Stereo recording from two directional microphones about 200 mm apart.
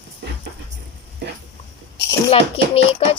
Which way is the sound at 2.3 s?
30° left (ahead or behind).